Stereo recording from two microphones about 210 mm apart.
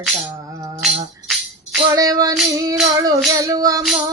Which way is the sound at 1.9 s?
15° right (ahead or behind).